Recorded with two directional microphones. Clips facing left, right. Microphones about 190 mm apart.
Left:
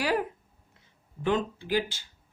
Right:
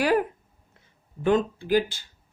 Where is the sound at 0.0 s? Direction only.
55° right (ahead or behind).